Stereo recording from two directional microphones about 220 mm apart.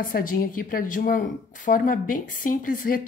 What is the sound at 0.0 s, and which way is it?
Speech, 40° left (ahead or behind).